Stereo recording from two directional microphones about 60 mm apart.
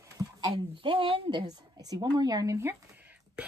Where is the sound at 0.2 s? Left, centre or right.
Right.